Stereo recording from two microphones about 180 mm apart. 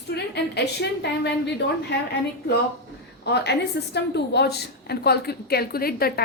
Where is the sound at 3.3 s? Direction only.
70° left (ahead or behind).